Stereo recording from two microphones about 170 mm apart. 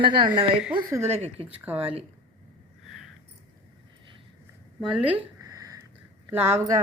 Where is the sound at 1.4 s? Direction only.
10° right (ahead or behind).